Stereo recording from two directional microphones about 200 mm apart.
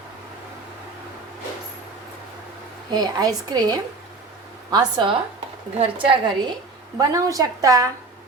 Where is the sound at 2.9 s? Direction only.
20° right (ahead or behind).